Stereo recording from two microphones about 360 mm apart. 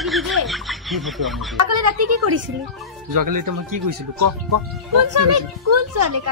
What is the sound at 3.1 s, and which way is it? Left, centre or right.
Speech, right.